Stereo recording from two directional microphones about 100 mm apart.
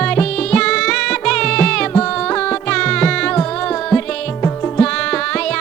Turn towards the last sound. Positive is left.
turn(degrees=10)  # may be behind; listen again after turning